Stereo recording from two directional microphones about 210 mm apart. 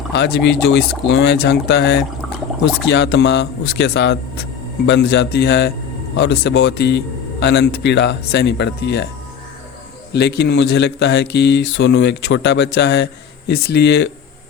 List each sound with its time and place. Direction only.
0.1 s speech: 55° left (ahead or behind)
10.1 s speech: 55° left (ahead or behind)